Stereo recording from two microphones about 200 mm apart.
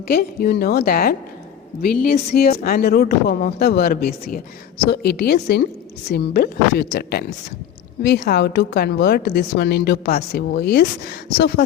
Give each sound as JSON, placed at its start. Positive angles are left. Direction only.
{"t": 0.1, "sound": "a woman's voice", "side_deg": 50}